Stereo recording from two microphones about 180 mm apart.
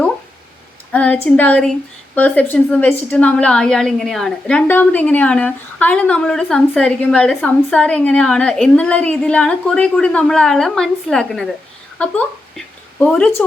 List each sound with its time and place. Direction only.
0.9 s a woman's voice: 5° left (ahead or behind)